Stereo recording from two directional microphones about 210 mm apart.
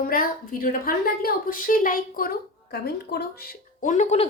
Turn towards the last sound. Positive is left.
turn(degrees=35)  # may be behind; listen again after turning